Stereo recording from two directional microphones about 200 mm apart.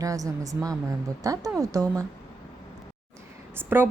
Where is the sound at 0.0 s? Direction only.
15° right (ahead or behind).